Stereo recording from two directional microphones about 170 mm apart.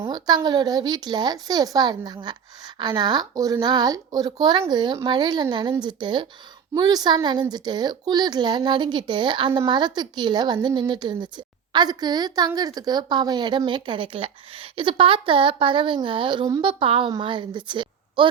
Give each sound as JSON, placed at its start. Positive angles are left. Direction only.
{"t": 0.0, "sound": "speech", "side_deg": -25}